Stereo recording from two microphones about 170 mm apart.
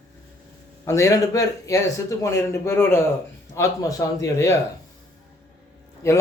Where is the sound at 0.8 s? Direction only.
15° left (ahead or behind).